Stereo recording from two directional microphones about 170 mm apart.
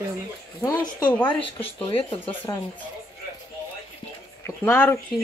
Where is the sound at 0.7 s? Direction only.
25° left (ahead or behind).